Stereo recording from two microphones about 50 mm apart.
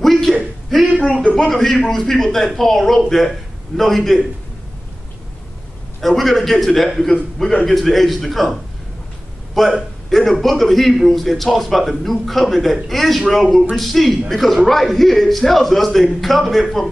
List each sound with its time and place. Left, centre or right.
0.0 s a sound: centre
1.4 s a man's voice: centre
5.9 s a man's voice: centre
9.6 s a man's voice: centre